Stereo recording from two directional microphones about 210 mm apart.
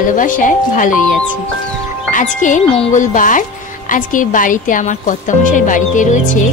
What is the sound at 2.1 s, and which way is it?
A woman's voice, 40° left (ahead or behind).